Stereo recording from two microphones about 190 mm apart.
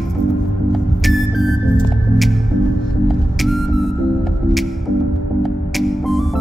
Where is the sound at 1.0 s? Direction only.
Centre (ahead or behind).